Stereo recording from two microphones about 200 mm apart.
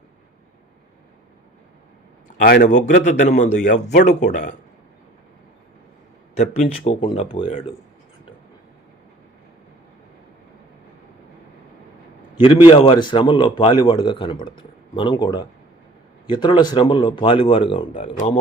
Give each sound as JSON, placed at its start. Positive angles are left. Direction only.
{"t": 2.4, "sound": "speech", "side_deg": 45}
{"t": 6.3, "sound": "speech", "side_deg": 30}
{"t": 12.4, "sound": "speech", "side_deg": 25}